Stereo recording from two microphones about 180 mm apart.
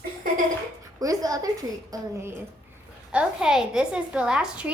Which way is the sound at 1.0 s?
20° right (ahead or behind).